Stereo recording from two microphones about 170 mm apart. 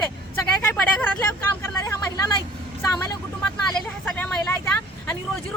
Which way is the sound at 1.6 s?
15° left (ahead or behind).